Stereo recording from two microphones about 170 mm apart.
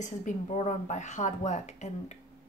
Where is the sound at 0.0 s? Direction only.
45° left (ahead or behind).